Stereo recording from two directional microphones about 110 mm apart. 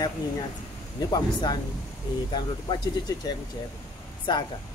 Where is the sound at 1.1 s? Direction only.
40° left (ahead or behind).